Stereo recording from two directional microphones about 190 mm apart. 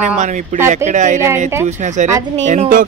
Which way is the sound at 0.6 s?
40° right (ahead or behind).